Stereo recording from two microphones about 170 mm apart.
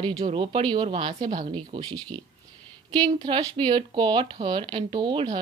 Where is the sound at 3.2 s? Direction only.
25° right (ahead or behind).